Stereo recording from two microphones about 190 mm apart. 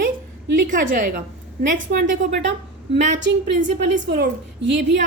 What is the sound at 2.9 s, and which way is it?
A woman's voice, 70° right (ahead or behind).